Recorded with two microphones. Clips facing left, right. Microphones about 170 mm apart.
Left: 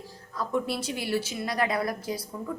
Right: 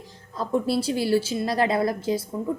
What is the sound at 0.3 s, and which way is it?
A woman's voice, 30° right (ahead or behind).